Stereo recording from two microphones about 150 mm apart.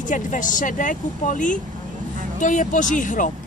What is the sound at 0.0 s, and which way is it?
A woman's voice, 60° left (ahead or behind).